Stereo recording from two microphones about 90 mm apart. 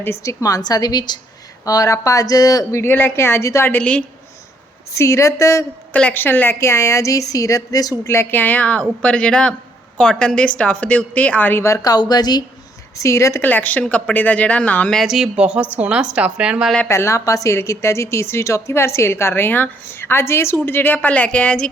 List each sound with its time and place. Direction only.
0.0 s a woman's voice: 30° left (ahead or behind)
2.8 s a woman's voice: 25° left (ahead or behind)
3.8 s speech: 15° left (ahead or behind)
4.9 s a woman's voice: 35° left (ahead or behind)
5.9 s a woman's voice: 15° left (ahead or behind); by 7.9 s 40° left (ahead or behind)
8.0 s speech: 30° left (ahead or behind)
11.6 s a woman's voice: 40° left (ahead or behind)
13.0 s a woman's voice: 35° left (ahead or behind)
13.4 s a woman's voice: 20° left (ahead or behind)
14.9 s a woman's voice: 5° right (ahead or behind)
16.9 s a woman's voice: 30° left (ahead or behind); by 21.7 s 15° left (ahead or behind)